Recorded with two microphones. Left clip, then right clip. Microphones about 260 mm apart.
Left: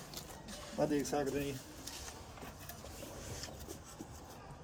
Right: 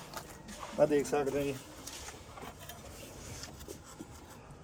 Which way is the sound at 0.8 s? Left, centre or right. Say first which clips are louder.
Right 7 dB; centre.